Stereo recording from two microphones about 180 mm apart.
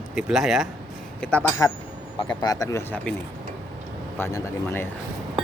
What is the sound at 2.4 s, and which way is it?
Speech, 20° left (ahead or behind).